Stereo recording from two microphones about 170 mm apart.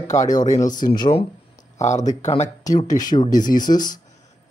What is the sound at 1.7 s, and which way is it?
Speech, 45° left (ahead or behind).